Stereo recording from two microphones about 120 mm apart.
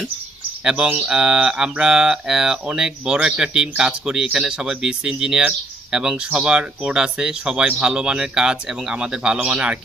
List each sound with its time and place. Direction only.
0.6 s speech: 10° right (ahead or behind)